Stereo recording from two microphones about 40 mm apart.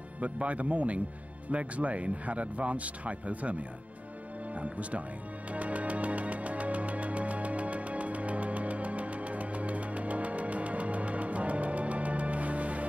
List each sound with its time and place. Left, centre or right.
0.2 s speech: right
4.6 s speech: right
5.5 s music: right